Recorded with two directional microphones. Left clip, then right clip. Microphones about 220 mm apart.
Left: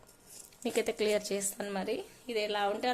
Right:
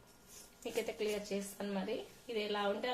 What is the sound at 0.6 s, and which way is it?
Speech, 50° left (ahead or behind).